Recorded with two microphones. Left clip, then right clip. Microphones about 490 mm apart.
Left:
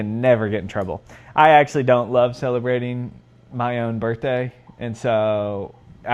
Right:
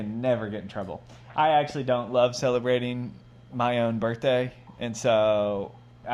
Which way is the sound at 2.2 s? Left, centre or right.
Left.